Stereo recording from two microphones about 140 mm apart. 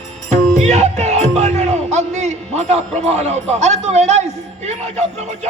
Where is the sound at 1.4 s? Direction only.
55° right (ahead or behind).